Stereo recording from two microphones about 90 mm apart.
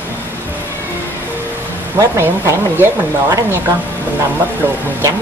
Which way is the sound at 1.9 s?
30° right (ahead or behind).